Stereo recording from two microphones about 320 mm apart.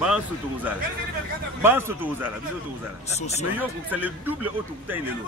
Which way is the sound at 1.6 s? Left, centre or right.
Centre.